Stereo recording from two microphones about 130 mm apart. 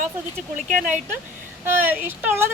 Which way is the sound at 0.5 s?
70° right (ahead or behind).